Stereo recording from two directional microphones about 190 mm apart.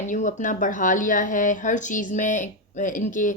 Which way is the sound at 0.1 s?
40° left (ahead or behind).